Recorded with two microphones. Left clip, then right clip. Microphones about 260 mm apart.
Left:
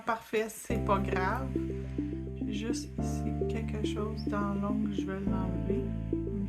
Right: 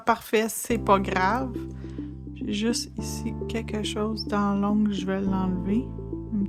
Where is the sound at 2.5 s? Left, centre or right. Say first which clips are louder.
Right 9 dB; right.